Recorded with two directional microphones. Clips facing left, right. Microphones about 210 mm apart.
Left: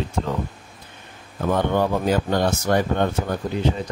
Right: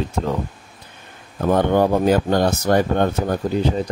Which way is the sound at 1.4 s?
45° right (ahead or behind).